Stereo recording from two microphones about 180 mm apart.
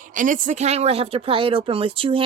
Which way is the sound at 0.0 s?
45° right (ahead or behind).